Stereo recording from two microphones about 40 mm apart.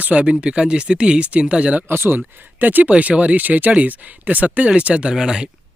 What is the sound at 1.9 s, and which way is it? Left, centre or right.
Speech, right.